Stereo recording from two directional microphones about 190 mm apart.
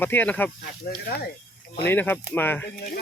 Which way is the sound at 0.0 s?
10° left (ahead or behind).